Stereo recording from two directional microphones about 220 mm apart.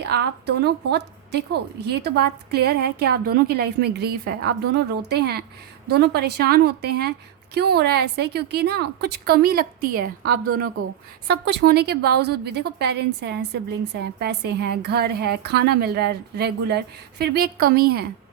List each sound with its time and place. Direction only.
0.0 s a woman's voice: 50° right (ahead or behind)